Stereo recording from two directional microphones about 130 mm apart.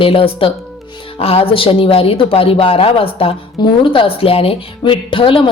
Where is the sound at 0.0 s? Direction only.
45° left (ahead or behind).